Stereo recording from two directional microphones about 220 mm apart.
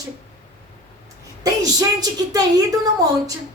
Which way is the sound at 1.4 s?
15° right (ahead or behind).